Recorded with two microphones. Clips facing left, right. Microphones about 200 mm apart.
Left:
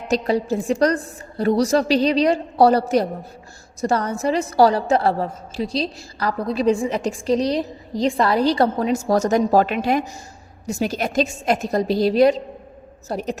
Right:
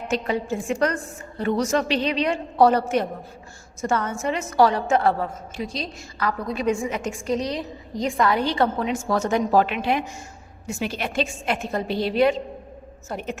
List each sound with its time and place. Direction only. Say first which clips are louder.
0.1 s a woman's voice: left 5 dB; 35° left (ahead or behind)